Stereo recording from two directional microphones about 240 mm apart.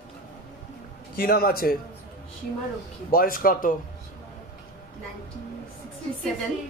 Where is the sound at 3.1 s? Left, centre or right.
Left.